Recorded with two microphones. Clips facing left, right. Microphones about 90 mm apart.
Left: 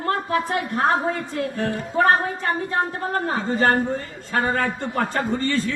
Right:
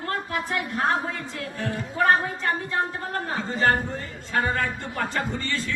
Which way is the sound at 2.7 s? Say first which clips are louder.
Left 4 dB; 35° left (ahead or behind).